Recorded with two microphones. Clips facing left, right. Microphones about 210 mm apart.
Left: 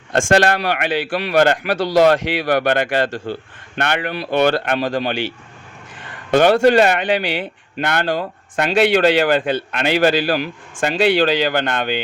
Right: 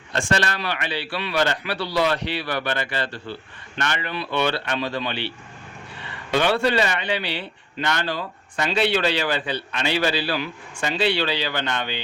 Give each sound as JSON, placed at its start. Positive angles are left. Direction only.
{"t": 0.1, "sound": "a man's voice", "side_deg": 55}
{"t": 3.8, "sound": "speech", "side_deg": 60}
{"t": 4.1, "sound": "a man's voice", "side_deg": 40}